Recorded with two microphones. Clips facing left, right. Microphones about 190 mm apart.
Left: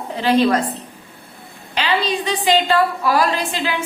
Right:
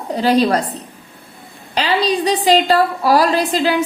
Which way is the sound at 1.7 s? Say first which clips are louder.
Right 3 dB; 35° right (ahead or behind).